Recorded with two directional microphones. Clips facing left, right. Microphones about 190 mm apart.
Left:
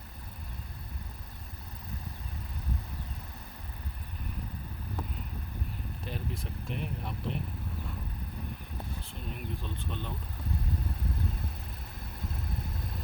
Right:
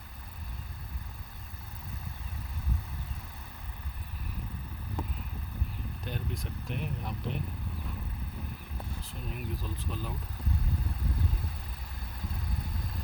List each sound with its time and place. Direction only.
6.1 s speech: centre (ahead or behind)
9.0 s speech: centre (ahead or behind)